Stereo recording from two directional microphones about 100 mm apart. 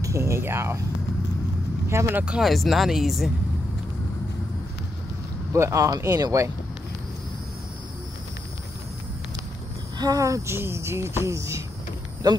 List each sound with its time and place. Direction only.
0.0 s speech: 30° right (ahead or behind)
1.9 s speech: 25° right (ahead or behind)
2.2 s speech: 5° right (ahead or behind)
5.5 s speech: 30° right (ahead or behind)
9.9 s speech: 40° right (ahead or behind)
12.2 s speech: 45° right (ahead or behind)